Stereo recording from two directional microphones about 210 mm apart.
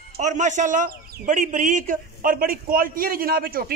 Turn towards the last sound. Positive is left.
turn(degrees=-45)  # may be behind; listen again after turning